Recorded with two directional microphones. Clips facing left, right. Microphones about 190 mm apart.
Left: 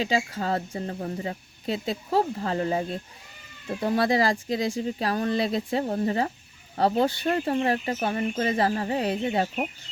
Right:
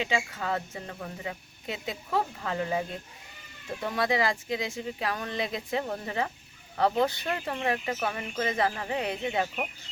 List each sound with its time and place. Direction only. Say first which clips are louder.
0.0 s speech: left 4 dB; 35° left (ahead or behind)